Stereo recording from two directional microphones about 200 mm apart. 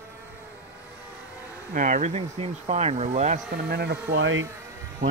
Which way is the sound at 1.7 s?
40° right (ahead or behind).